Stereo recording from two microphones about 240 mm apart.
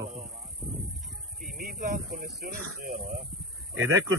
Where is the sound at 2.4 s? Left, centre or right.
Right.